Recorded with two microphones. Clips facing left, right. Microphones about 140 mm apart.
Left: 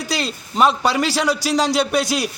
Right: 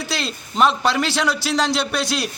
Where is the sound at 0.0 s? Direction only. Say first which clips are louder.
Left 2 dB; 40° left (ahead or behind).